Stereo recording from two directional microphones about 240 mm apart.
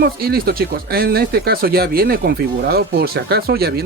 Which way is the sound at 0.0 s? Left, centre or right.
Right.